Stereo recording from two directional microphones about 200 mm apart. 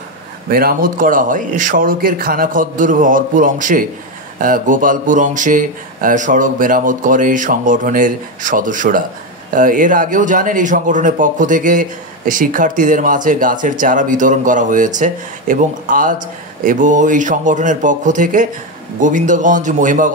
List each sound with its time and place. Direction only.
0.5 s a man's voice: 50° right (ahead or behind)